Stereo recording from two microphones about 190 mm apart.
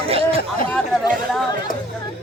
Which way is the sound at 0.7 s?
Centre (ahead or behind).